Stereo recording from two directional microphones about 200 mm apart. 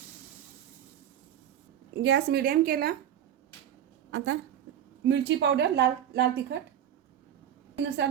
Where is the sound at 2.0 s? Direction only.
60° right (ahead or behind).